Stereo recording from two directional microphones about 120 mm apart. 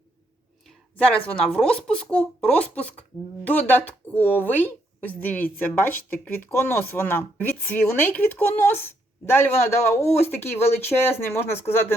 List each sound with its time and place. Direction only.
1.3 s a woman's voice: 10° left (ahead or behind)